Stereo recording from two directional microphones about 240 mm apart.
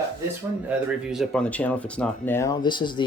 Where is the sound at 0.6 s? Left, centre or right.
Centre.